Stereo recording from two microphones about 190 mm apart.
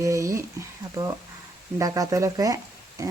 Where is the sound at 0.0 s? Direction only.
15° right (ahead or behind).